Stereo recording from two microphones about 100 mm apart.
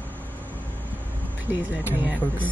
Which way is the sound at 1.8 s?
20° right (ahead or behind).